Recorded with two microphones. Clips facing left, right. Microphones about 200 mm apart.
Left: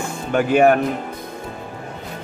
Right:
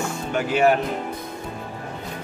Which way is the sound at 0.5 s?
55° left (ahead or behind).